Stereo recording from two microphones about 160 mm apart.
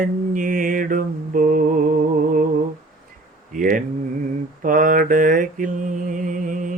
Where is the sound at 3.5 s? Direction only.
60° right (ahead or behind).